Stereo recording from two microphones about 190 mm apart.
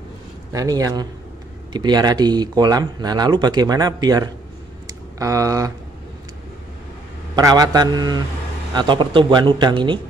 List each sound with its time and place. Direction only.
0.5 s speech: 20° right (ahead or behind)
7.3 s speech: 20° right (ahead or behind)